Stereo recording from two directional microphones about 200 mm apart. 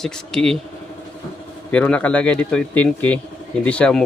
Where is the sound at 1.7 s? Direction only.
5° left (ahead or behind).